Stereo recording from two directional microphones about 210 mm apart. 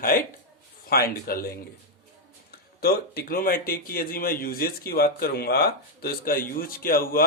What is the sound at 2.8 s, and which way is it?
Speech, 45° left (ahead or behind).